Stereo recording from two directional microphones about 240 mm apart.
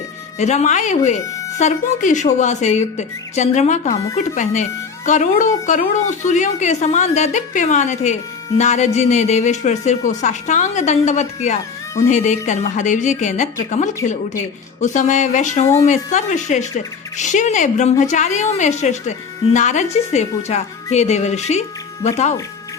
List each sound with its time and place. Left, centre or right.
0.3 s a woman's voice: left